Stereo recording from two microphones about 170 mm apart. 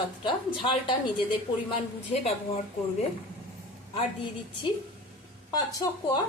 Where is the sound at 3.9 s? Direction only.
30° left (ahead or behind).